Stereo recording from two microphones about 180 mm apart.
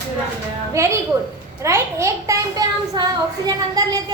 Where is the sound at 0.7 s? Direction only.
15° right (ahead or behind).